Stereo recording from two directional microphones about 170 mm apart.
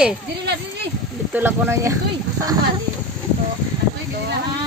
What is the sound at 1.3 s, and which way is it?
Speech, 15° right (ahead or behind).